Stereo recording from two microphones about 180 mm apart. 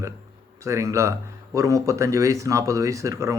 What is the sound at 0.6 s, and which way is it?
Speech, 15° right (ahead or behind).